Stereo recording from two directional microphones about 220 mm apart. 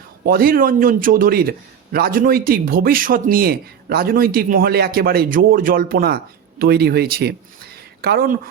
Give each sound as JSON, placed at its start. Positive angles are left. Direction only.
{"t": 0.3, "sound": "a man's voice", "side_deg": -40}